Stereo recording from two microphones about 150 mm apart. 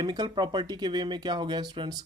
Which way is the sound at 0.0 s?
30° right (ahead or behind).